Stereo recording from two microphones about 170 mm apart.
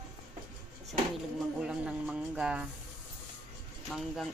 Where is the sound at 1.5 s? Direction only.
5° right (ahead or behind).